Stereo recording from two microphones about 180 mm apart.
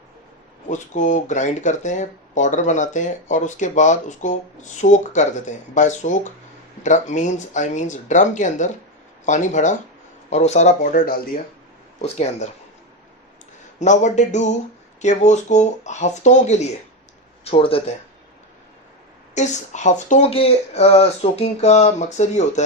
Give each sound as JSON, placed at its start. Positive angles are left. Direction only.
{"t": 0.7, "sound": "speech", "side_deg": 40}
{"t": 12.0, "sound": "speech", "side_deg": 40}
{"t": 13.7, "sound": "speech", "side_deg": 40}
{"t": 19.3, "sound": "speech", "side_deg": 40}